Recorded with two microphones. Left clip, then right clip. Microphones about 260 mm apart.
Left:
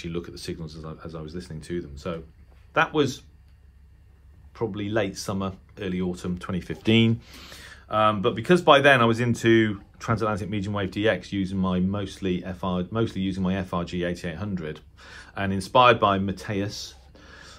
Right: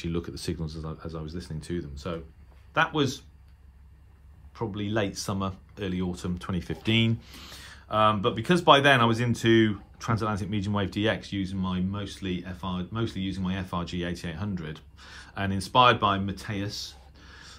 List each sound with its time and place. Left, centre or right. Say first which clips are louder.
0.0 s speech: even; centre
4.6 s speech: left 3 dB; centre